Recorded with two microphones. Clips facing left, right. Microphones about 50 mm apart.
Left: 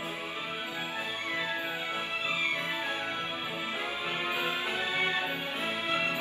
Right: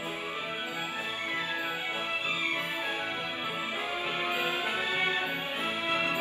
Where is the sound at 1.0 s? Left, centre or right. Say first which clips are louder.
Left 1 dB; right.